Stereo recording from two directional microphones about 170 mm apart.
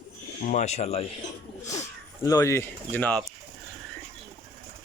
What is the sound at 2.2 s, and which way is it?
Speech, 15° left (ahead or behind).